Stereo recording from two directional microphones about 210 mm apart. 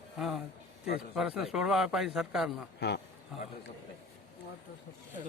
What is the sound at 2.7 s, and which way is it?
Speech, 50° left (ahead or behind).